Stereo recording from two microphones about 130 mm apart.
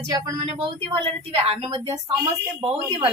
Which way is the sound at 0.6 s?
40° right (ahead or behind).